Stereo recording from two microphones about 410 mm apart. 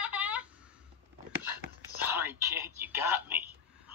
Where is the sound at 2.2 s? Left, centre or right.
Centre.